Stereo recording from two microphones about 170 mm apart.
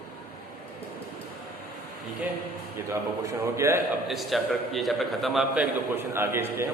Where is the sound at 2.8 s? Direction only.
15° right (ahead or behind).